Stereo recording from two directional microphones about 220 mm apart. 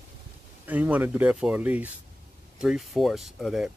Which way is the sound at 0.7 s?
5° right (ahead or behind).